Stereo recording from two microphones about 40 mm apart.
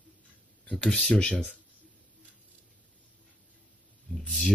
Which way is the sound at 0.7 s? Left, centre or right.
Centre.